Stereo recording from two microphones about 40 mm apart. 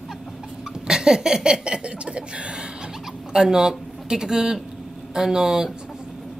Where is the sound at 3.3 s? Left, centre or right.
Centre.